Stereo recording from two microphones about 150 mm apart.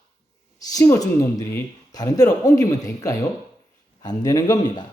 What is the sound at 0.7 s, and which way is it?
Speech, 25° left (ahead or behind).